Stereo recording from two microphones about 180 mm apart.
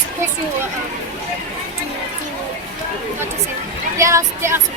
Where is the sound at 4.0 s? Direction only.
15° right (ahead or behind).